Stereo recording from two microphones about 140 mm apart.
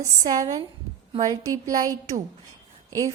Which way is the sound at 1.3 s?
25° right (ahead or behind).